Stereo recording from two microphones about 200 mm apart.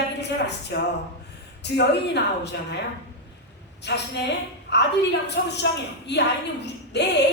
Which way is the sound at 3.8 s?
60° left (ahead or behind).